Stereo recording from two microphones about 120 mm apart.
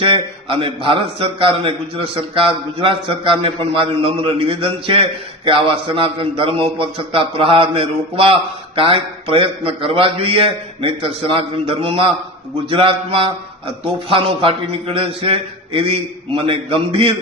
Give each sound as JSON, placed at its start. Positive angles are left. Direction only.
{"t": 0.0, "sound": "a man's voice", "side_deg": -50}